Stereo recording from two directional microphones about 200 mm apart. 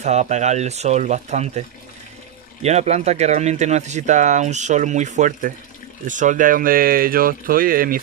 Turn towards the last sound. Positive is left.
turn(degrees=-45)  # may be behind; listen again after turning